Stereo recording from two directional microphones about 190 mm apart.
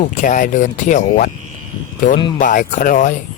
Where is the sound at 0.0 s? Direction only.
45° left (ahead or behind).